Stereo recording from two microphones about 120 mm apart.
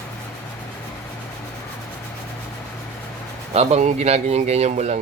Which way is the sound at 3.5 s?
60° right (ahead or behind).